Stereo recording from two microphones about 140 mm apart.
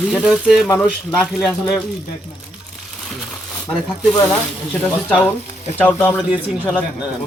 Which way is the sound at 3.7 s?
5° left (ahead or behind).